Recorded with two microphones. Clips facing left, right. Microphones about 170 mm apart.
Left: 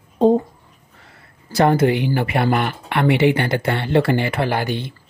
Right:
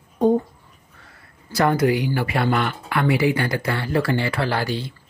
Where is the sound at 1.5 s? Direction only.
25° left (ahead or behind).